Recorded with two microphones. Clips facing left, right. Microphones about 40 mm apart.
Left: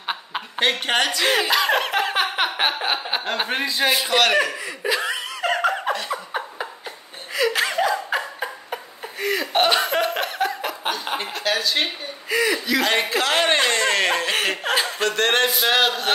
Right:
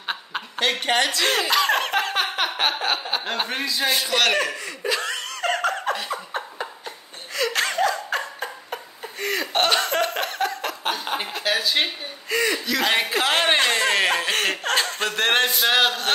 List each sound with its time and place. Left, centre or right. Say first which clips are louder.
0.0 s chuckle: left 1 dB; centre
0.6 s speech: left 1 dB; left
1.0 s speech: left 2 dB; centre
3.6 s a man's voice: left 3 dB; left
4.0 s snicker: left 2 dB; centre
5.9 s a sound: left 2 dB; centre
7.3 s laughter: left 2 dB; centre
10.9 s speech: even; centre